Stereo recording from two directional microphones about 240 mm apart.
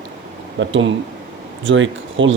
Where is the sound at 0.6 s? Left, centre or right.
Right.